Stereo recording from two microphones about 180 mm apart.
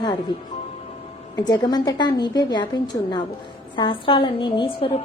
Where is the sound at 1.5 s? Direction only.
20° left (ahead or behind).